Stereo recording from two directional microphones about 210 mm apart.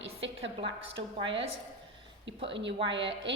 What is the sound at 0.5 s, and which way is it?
Speech, 25° right (ahead or behind).